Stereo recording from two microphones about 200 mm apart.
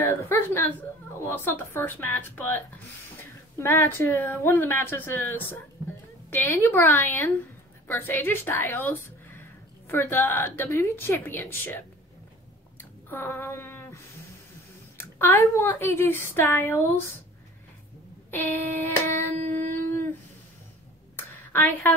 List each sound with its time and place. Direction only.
0.0 s a woman's voice: 10° left (ahead or behind)
12.7 s a sound: 10° left (ahead or behind)
15.0 s a woman's voice: 10° left (ahead or behind)
18.3 s a woman's voice: 10° left (ahead or behind)
19.3 s a sound: 40° right (ahead or behind)
21.5 s a woman's voice: 10° left (ahead or behind)